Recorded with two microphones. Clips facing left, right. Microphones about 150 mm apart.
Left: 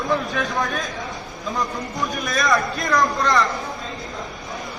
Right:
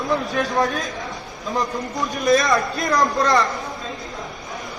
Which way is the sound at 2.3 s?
20° right (ahead or behind).